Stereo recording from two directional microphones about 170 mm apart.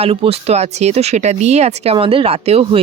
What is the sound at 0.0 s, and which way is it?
Speech, 35° right (ahead or behind).